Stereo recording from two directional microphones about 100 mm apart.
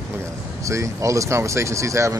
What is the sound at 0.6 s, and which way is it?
Speech, 30° right (ahead or behind).